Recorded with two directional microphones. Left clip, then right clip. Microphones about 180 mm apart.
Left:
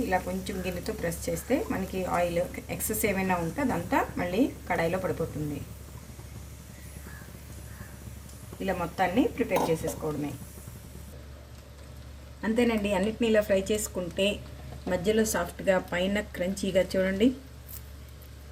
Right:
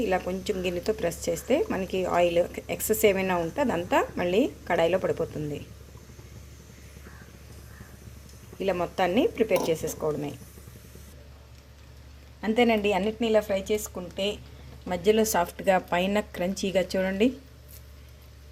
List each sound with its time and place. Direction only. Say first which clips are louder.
0.1 s a woman's voice: right 2 dB; 50° right (ahead or behind)
8.5 s speech: right 3 dB; 55° right (ahead or behind)
12.4 s speech: right 4 dB; 45° right (ahead or behind)
14.8 s speech: right 3 dB; 45° right (ahead or behind)